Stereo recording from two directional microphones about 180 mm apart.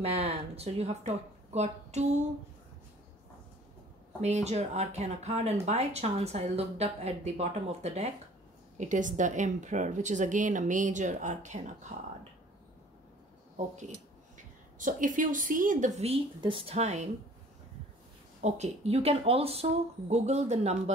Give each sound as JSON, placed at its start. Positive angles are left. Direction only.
{"t": 0.0, "sound": "speech", "side_deg": -35}
{"t": 4.2, "sound": "speech", "side_deg": -40}
{"t": 14.8, "sound": "speech", "side_deg": -45}
{"t": 18.4, "sound": "speech", "side_deg": -35}